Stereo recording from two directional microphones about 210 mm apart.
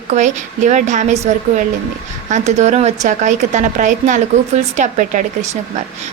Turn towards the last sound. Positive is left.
turn(degrees=-35)  # may be behind; listen again after turning